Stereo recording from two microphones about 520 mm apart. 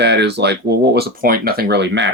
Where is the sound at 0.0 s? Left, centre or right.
Centre.